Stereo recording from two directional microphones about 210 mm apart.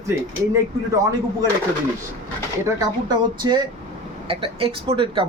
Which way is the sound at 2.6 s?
20° right (ahead or behind).